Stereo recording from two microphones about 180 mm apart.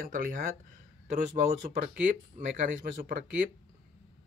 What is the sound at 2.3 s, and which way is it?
Speech, 50° right (ahead or behind).